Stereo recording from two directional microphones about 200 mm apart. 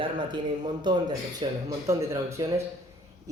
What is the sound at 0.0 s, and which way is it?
Speech, 25° right (ahead or behind).